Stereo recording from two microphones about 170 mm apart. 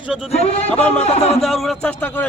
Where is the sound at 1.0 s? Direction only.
40° left (ahead or behind).